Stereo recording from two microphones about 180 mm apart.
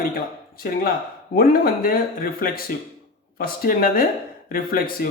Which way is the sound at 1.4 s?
55° left (ahead or behind).